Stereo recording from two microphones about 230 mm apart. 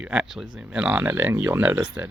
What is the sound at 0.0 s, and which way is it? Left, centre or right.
Speech, centre.